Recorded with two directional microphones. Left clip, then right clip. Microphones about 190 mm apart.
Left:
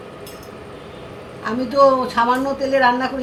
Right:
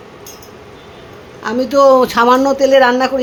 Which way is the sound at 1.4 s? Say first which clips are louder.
Right 5 dB; 60° right (ahead or behind).